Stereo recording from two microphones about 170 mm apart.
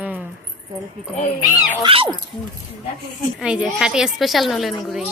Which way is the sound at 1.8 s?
30° right (ahead or behind).